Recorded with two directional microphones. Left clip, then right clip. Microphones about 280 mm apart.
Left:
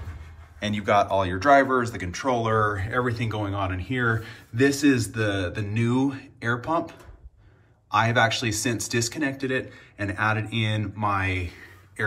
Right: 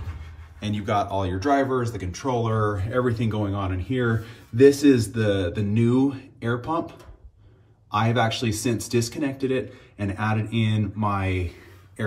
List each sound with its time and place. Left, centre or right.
0.6 s speech: centre; by 5.4 s right
5.4 s mantra: left
5.7 s speech: right